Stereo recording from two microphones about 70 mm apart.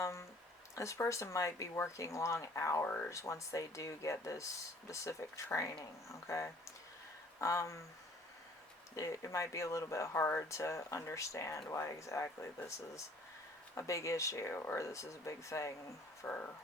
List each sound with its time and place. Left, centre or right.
0.0 s a sound: left
0.8 s speech: left
2.8 s speech: left
3.1 s speech: left
9.0 s speech: left
16.2 s speech: left